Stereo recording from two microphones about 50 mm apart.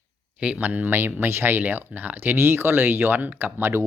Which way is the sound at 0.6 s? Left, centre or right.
Right.